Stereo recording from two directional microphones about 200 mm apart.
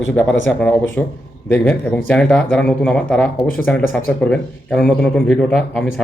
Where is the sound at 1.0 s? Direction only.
5° left (ahead or behind).